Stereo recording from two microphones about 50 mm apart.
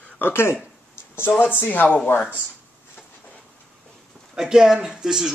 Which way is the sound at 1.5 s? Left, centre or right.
Left.